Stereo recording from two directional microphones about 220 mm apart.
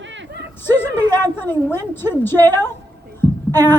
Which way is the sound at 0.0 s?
55° right (ahead or behind).